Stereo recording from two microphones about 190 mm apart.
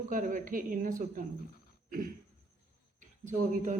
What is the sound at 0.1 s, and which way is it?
Speech, 45° right (ahead or behind).